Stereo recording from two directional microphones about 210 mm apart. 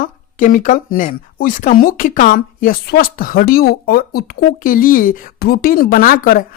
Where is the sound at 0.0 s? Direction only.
40° left (ahead or behind).